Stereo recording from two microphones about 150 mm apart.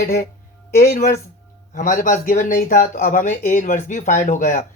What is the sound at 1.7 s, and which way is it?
Speech, 60° left (ahead or behind).